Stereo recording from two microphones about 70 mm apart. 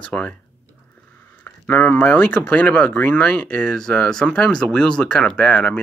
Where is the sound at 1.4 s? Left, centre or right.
Left.